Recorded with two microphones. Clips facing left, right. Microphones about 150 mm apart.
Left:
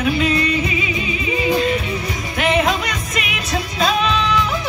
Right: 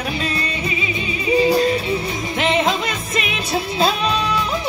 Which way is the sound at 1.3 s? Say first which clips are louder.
Right 3 dB; 35° right (ahead or behind).